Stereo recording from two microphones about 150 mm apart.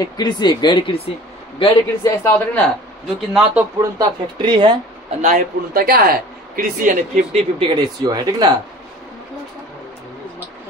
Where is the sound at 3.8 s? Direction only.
30° right (ahead or behind).